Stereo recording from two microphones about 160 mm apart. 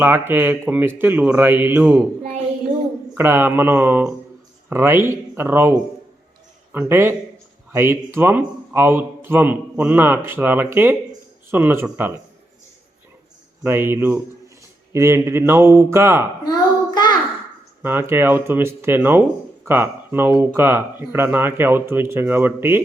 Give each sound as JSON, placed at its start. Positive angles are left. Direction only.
{"t": 0.0, "sound": "speech", "side_deg": -10}
{"t": 3.2, "sound": "speech", "side_deg": -15}
{"t": 6.7, "sound": "speech", "side_deg": -15}
{"t": 13.6, "sound": "speech", "side_deg": -15}
{"t": 16.4, "sound": "child singing", "side_deg": 25}
{"t": 17.8, "sound": "speech", "side_deg": -15}